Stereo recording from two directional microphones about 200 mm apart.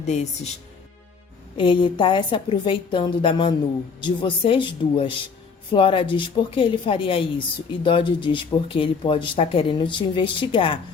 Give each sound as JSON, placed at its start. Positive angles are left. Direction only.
{"t": 0.0, "sound": "speech", "side_deg": 35}
{"t": 1.5, "sound": "a woman's voice", "side_deg": 25}